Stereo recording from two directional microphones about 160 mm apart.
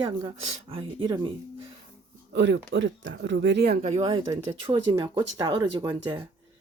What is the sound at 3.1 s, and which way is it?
Speech, 90° right.